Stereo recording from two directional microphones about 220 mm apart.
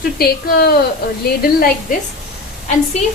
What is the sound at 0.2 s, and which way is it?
A woman's voice, 45° left (ahead or behind).